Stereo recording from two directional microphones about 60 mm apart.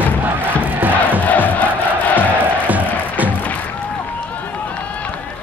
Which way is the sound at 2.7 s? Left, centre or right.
Right.